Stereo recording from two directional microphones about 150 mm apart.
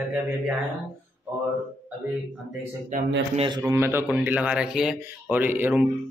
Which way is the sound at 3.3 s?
30° right (ahead or behind).